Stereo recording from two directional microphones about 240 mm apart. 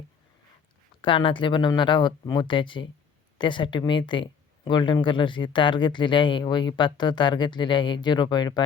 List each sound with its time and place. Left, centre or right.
1.0 s speech: left